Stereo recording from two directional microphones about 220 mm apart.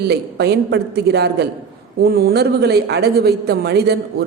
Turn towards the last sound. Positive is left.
turn(degrees=-45)  # may be behind; listen again after turning